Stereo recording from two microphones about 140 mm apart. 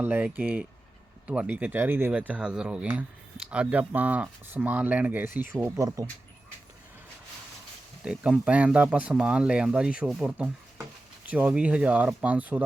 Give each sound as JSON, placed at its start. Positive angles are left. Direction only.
{"t": 0.0, "sound": "speech", "side_deg": -10}
{"t": 8.0, "sound": "speech", "side_deg": -5}